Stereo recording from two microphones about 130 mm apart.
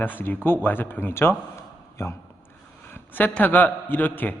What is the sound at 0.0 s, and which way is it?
A man's voice, 15° left (ahead or behind).